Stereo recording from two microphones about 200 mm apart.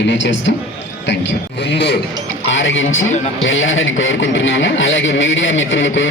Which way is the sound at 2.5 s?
70° left (ahead or behind).